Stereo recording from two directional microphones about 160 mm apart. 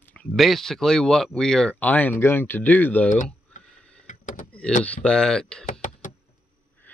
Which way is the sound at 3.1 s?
55° left (ahead or behind).